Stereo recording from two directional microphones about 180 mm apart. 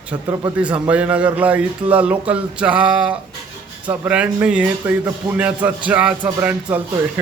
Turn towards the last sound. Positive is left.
turn(degrees=-10)  # may be behind; listen again after turning